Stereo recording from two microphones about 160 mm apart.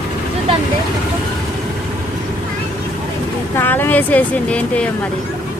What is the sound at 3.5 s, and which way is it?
Speech, 15° left (ahead or behind).